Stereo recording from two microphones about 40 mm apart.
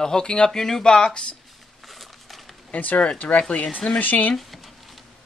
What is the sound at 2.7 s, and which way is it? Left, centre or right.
Speech, left.